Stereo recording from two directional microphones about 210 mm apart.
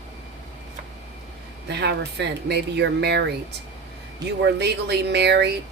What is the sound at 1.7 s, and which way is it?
Speech, 55° right (ahead or behind).